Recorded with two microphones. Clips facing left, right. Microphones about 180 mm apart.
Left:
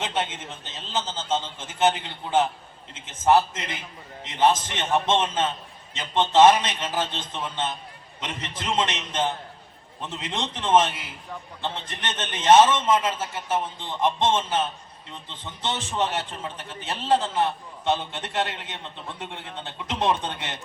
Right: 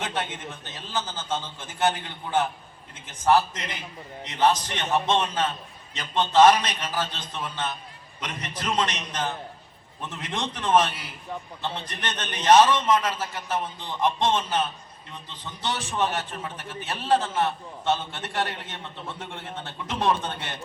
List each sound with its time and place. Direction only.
0.0 s a man's voice: 20° left (ahead or behind)